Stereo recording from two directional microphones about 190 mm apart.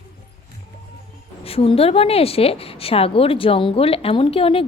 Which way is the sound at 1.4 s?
30° left (ahead or behind).